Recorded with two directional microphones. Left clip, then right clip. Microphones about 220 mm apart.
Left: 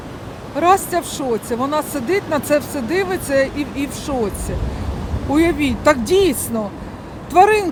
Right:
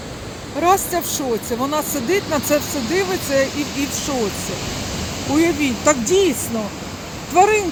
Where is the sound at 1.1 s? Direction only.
15° left (ahead or behind).